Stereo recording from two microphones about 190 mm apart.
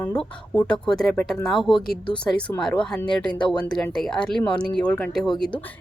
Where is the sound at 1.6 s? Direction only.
25° left (ahead or behind).